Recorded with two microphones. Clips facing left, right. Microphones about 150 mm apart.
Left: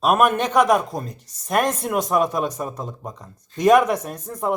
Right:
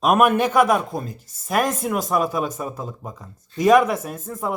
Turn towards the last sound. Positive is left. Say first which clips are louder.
# left 2 dB
turn(degrees=0)  # may be behind; listen again after turning